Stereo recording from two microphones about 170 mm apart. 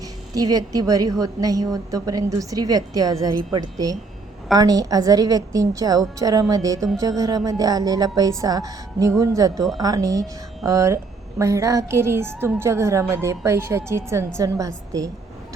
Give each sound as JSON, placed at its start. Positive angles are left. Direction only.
{"t": 0.3, "sound": "a woman's voice", "side_deg": -20}